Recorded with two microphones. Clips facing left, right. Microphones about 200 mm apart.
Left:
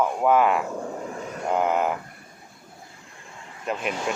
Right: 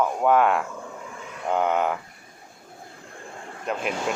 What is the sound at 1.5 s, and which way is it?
Speech, centre (ahead or behind).